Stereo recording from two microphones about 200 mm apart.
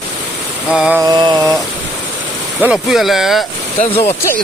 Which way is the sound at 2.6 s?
5° right (ahead or behind).